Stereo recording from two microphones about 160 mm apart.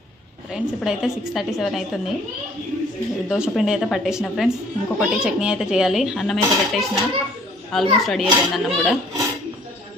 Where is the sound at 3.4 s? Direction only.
Centre (ahead or behind).